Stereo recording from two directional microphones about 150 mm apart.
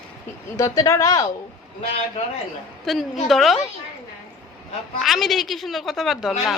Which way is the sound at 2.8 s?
Centre (ahead or behind).